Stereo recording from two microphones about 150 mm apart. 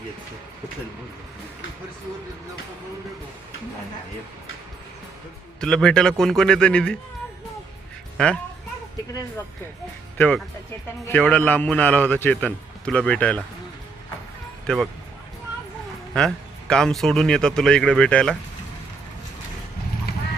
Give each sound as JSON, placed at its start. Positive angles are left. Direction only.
{"t": 5.5, "sound": "speech", "side_deg": 5}
{"t": 8.2, "sound": "a man's voice", "side_deg": 5}
{"t": 10.2, "sound": "a man's voice", "side_deg": 5}
{"t": 16.1, "sound": "speech", "side_deg": 5}
{"t": 20.1, "sound": "clip-clop", "side_deg": 90}